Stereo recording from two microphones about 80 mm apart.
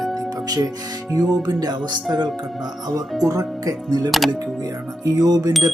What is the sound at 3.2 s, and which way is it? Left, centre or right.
Speech, right.